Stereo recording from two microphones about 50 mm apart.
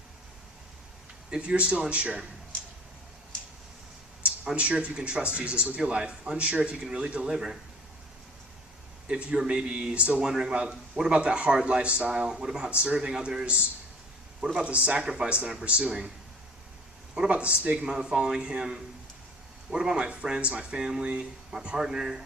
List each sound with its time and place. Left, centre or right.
1.3 s speech: right
4.5 s speech: right
7.3 s speech: centre
9.0 s speech: right
10.2 s speech: centre
15.0 s speech: centre
15.3 s speech: right
17.2 s speech: right
17.8 s speech: centre
19.7 s speech: centre